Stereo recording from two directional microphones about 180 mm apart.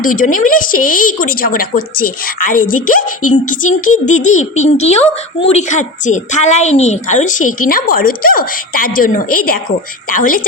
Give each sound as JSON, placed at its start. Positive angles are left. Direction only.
{"t": 0.0, "sound": "a woman's voice", "side_deg": 50}